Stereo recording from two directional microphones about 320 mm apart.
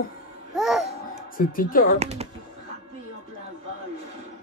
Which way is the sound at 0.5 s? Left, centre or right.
Centre.